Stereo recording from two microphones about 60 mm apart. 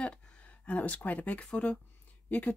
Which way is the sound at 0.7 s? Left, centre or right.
Left.